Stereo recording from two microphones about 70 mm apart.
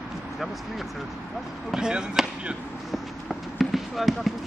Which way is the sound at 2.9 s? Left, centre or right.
Centre.